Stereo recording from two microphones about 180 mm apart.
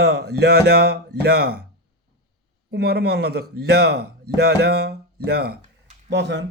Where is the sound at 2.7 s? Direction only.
60° right (ahead or behind).